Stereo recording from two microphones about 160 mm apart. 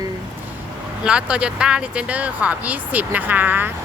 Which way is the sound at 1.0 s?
5° right (ahead or behind).